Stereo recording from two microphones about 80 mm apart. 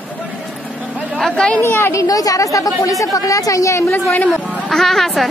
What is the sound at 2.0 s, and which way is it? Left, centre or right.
A woman's voice, left.